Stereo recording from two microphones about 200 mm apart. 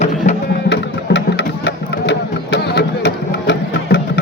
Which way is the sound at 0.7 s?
60° left (ahead or behind).